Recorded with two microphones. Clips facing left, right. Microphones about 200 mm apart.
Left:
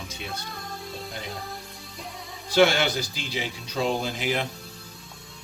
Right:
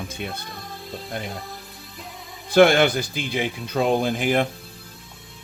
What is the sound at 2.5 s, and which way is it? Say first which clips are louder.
Speech: right 5 dB; 55° right (ahead or behind).